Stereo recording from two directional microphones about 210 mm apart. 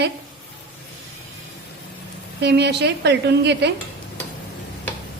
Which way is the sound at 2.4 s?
50° right (ahead or behind).